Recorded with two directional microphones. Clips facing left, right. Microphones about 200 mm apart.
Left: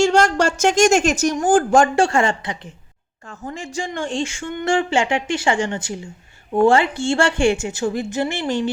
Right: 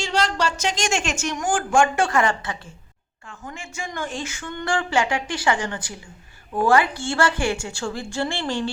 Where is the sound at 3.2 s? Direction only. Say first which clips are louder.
Left 6 dB; 40° left (ahead or behind).